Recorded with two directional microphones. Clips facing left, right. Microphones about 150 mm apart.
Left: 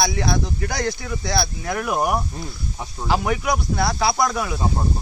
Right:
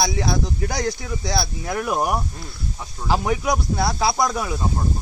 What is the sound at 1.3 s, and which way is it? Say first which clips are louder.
A man's voice: left 1 dB; centre (ahead or behind).